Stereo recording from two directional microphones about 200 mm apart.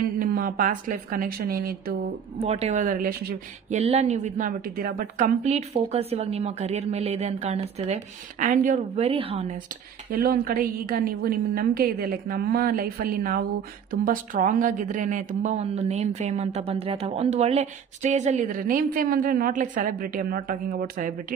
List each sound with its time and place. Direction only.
0.0 s a woman's voice: 45° right (ahead or behind)
2.3 s a woman's voice: 30° right (ahead or behind)
3.8 s a woman's voice: 30° right (ahead or behind)
10.1 s a woman's voice: 45° right (ahead or behind)